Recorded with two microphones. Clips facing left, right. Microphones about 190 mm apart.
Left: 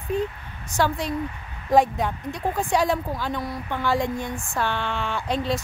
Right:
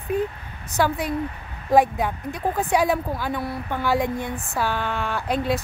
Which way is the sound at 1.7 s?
10° right (ahead or behind).